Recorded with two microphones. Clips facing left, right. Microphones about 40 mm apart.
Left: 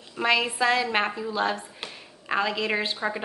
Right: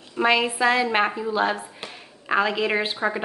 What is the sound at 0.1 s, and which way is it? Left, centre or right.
A woman's voice, centre.